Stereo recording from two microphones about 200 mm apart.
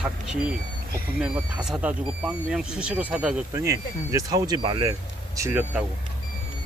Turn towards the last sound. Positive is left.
turn(degrees=-10)  # may be behind; listen again after turning